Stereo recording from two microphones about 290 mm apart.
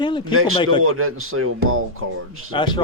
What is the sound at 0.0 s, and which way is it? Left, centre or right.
Speech, centre.